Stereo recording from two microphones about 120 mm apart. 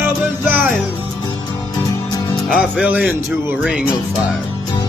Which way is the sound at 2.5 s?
5° right (ahead or behind).